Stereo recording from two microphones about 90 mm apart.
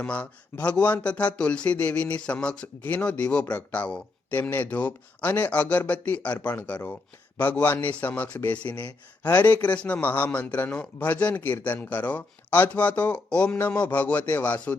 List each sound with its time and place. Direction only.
0.0 s speech: 15° left (ahead or behind)